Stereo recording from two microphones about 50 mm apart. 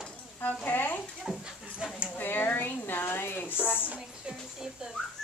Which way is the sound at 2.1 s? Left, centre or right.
Left.